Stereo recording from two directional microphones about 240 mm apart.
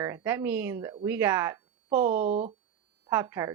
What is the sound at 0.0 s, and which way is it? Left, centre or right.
Speech, centre.